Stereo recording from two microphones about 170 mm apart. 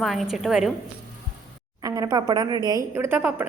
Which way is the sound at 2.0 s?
20° right (ahead or behind).